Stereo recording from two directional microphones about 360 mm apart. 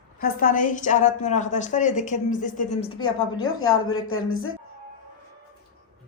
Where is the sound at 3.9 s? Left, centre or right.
Left.